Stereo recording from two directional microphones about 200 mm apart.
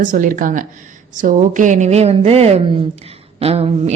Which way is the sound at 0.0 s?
40° right (ahead or behind).